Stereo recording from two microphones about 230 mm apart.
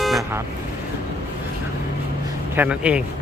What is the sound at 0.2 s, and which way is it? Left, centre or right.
Speech, centre.